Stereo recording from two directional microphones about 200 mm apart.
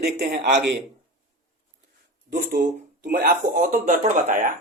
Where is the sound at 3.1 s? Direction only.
45° right (ahead or behind).